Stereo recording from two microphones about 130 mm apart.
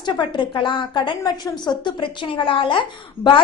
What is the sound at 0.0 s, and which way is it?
A woman's voice, 35° left (ahead or behind).